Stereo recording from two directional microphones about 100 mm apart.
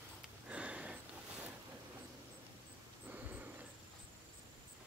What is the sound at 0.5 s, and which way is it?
Sniff, 10° right (ahead or behind).